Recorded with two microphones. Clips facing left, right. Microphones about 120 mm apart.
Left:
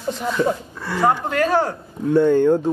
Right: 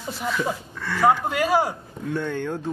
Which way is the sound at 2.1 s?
15° left (ahead or behind).